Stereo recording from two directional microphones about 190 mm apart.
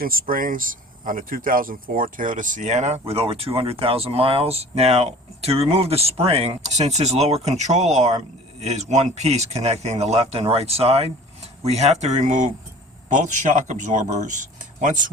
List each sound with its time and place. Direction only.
0.0 s speech: 50° right (ahead or behind)